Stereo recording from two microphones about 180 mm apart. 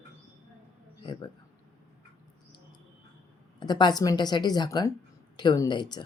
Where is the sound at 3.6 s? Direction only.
25° left (ahead or behind).